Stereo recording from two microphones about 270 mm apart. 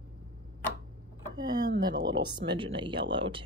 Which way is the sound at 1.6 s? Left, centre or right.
Right.